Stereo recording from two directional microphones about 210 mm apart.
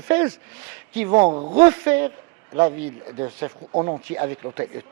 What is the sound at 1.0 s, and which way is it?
Speech, 15° right (ahead or behind).